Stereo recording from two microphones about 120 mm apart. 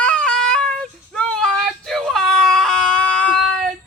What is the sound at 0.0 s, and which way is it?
Child singing, 10° left (ahead or behind).